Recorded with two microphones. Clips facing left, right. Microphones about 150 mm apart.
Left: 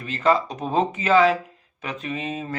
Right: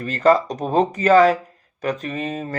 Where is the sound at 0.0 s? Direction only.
40° right (ahead or behind).